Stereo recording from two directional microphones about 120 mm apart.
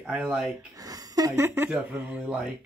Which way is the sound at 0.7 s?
30° right (ahead or behind).